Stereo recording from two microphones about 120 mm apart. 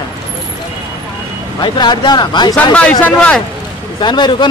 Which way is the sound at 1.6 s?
40° left (ahead or behind).